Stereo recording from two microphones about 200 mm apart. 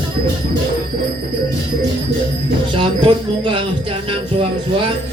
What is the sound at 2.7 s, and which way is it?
Speech, 25° right (ahead or behind).